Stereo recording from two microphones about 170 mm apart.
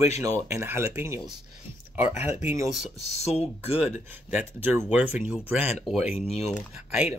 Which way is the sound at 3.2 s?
35° left (ahead or behind).